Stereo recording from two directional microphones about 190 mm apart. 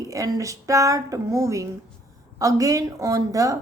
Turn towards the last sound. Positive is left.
turn(degrees=-15)  # may be behind; listen again after turning